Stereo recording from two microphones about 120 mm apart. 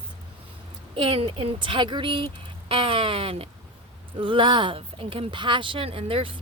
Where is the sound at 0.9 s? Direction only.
50° right (ahead or behind).